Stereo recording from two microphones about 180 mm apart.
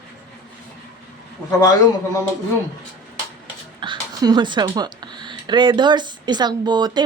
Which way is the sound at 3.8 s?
25° right (ahead or behind).